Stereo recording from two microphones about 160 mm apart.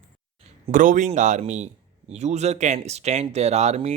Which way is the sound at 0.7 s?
55° right (ahead or behind).